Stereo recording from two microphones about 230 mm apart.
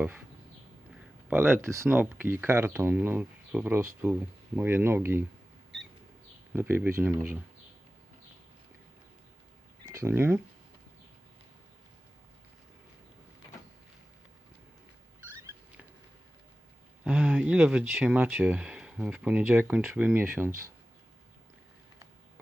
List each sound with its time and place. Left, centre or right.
1.3 s speech: centre
6.5 s speech: centre
9.8 s speech: centre
15.2 s a sound: centre
17.0 s speech: centre